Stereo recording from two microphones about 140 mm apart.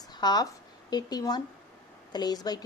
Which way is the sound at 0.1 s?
30° left (ahead or behind).